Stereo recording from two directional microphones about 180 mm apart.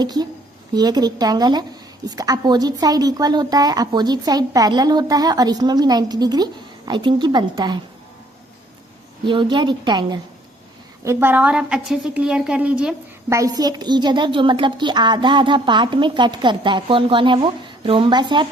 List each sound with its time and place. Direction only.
0.0 s a woman's voice: 20° right (ahead or behind)
9.2 s a woman's voice: 25° right (ahead or behind)
11.0 s a woman's voice: 15° right (ahead or behind)
13.3 s a woman's voice: 20° right (ahead or behind)